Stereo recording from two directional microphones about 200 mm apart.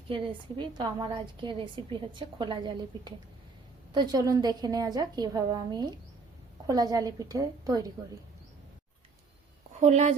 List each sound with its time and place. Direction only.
0.1 s a woman's voice: 25° right (ahead or behind)
9.8 s speech: 35° right (ahead or behind)